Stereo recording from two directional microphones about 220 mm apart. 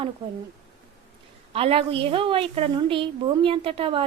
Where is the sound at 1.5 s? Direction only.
25° right (ahead or behind).